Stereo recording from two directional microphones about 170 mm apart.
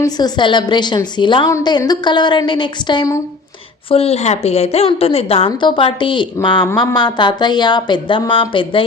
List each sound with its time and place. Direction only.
0.0 s a woman's voice: 25° left (ahead or behind)